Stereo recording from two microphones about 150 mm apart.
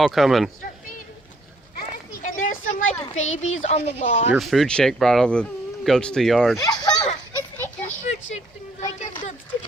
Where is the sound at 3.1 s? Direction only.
50° left (ahead or behind).